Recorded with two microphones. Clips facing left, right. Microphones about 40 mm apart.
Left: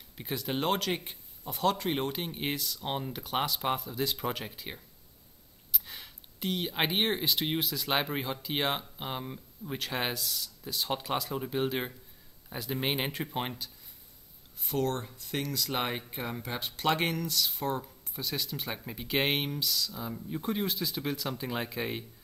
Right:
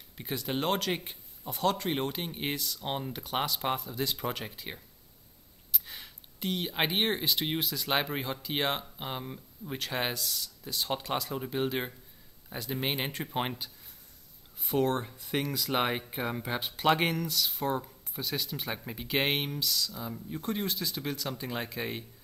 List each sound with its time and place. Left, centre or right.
0.2 s speech: centre
13.3 s speech: centre